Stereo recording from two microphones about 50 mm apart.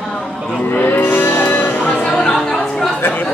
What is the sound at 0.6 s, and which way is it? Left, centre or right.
Music, left.